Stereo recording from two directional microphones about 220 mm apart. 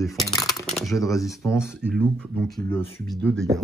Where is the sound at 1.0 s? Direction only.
15° left (ahead or behind).